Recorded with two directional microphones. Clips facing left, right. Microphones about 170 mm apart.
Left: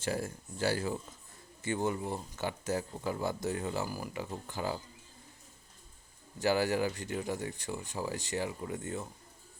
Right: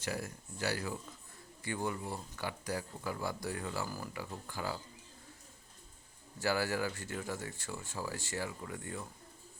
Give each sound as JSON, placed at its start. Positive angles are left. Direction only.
{"t": 0.0, "sound": "speech", "side_deg": 30}
{"t": 6.4, "sound": "speech", "side_deg": 20}